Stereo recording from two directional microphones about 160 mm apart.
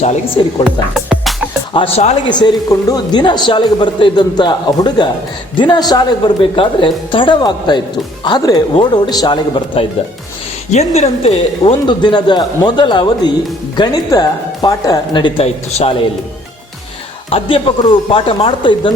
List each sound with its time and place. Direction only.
0.4 s speech: 30° left (ahead or behind)
0.9 s music: centre (ahead or behind)
1.7 s speech: 40° left (ahead or behind)
2.3 s speech: 25° left (ahead or behind)
10.7 s speech: 45° left (ahead or behind)
17.2 s speech: 35° left (ahead or behind)